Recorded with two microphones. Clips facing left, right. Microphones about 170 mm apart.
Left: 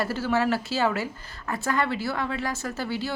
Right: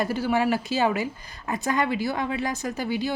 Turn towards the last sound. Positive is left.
turn(degrees=-15)  # may be behind; listen again after turning